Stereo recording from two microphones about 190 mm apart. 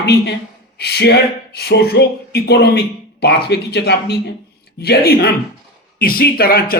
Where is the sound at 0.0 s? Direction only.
60° left (ahead or behind).